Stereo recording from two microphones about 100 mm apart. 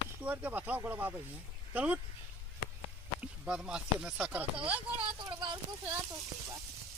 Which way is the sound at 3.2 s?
10° right (ahead or behind).